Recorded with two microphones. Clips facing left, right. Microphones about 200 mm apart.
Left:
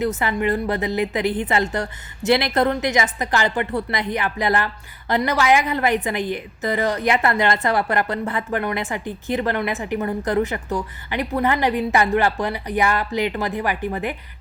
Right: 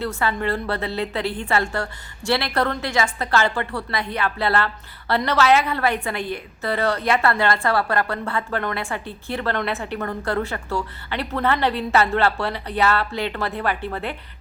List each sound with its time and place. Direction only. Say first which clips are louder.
0.0 s a woman's voice: left 3 dB; 20° left (ahead or behind)